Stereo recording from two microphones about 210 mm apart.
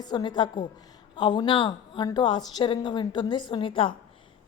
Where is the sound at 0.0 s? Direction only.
20° left (ahead or behind).